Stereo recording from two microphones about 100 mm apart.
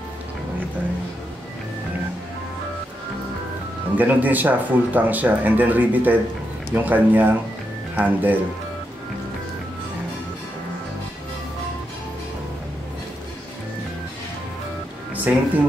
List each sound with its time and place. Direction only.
3.9 s speech: 15° right (ahead or behind)
15.1 s speech: 15° right (ahead or behind)